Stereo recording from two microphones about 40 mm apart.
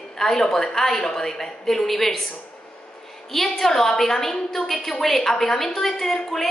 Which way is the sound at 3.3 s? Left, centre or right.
Centre.